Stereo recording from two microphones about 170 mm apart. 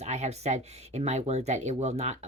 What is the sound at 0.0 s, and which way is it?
Speech, 40° right (ahead or behind).